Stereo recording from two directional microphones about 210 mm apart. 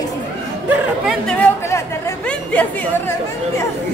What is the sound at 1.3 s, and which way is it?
Music, 10° left (ahead or behind).